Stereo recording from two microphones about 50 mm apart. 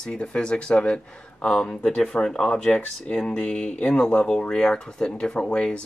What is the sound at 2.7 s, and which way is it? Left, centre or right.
Speech, left.